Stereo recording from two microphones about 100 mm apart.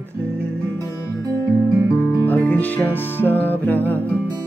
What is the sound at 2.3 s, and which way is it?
Music, 15° left (ahead or behind).